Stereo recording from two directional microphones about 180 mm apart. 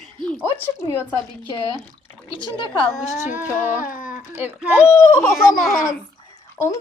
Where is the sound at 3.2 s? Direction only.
10° right (ahead or behind).